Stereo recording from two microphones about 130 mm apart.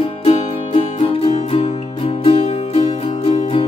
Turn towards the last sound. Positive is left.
turn(degrees=45)  # may be behind; listen again after turning